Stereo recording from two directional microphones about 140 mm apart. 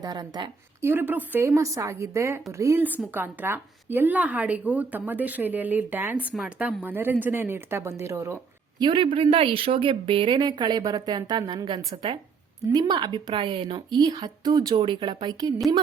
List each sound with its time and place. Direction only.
0.0 s a woman's voice: 30° right (ahead or behind)
0.8 s a woman's voice: 15° right (ahead or behind)
8.8 s speech: 35° right (ahead or behind)